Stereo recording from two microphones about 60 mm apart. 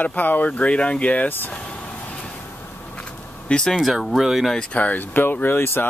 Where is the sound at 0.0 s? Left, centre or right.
Left.